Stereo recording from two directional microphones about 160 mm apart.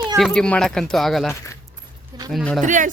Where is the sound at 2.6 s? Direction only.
55° right (ahead or behind).